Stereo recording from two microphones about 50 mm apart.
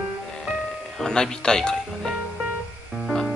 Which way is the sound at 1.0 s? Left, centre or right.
Centre.